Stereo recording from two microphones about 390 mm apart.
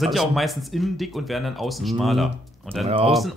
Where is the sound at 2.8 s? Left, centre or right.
Centre.